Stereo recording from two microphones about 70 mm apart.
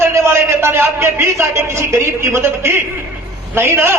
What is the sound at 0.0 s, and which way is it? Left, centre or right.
A man's voice, right.